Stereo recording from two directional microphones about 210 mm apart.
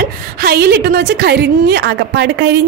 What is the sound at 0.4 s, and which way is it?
A woman's voice, 50° right (ahead or behind).